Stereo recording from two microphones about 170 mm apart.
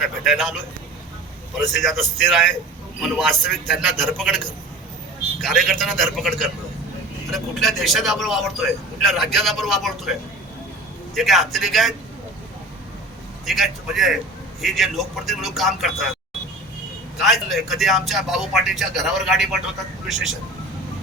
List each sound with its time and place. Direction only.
0.3 s a man's voice: centre (ahead or behind)
1.5 s a man's voice: centre (ahead or behind)
5.4 s a man's voice: centre (ahead or behind)
13.4 s a man's voice: centre (ahead or behind)
17.2 s a man's voice: centre (ahead or behind)